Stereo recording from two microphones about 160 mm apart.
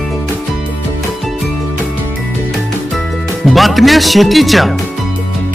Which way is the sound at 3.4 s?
Centre (ahead or behind).